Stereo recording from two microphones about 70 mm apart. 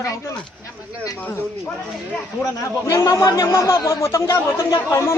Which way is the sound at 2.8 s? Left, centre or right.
Left.